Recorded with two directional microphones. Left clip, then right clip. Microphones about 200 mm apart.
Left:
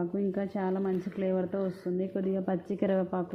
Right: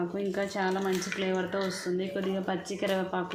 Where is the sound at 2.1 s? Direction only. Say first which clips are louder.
Even; 40° left (ahead or behind).